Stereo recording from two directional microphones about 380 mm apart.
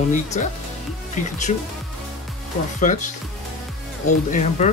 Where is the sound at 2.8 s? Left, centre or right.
Centre.